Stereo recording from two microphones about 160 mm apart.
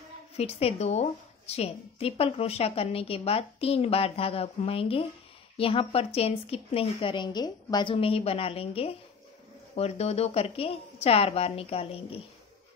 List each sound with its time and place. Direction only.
0.4 s a woman's voice: 40° left (ahead or behind)